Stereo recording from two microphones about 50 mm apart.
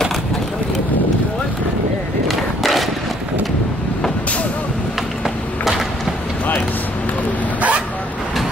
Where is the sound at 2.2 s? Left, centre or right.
Centre.